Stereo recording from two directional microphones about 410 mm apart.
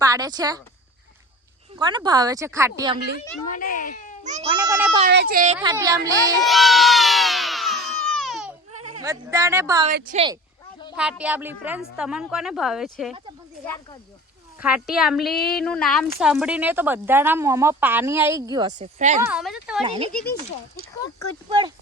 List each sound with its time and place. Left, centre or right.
0.0 s speech: centre
1.8 s a woman's voice: centre
3.5 s a child's voice: centre
4.2 s speech: centre
4.5 s a woman's voice: centre
5.0 s speech: right
5.5 s crowd: centre
8.9 s a woman's voice: centre
10.9 s a woman's voice: centre
14.6 s a woman's voice: centre
19.2 s a woman's voice: centre
19.8 s a woman's voice: centre